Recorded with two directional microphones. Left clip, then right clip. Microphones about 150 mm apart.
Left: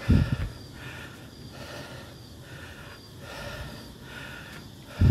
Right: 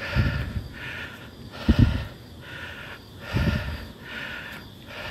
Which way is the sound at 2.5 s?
35° left (ahead or behind).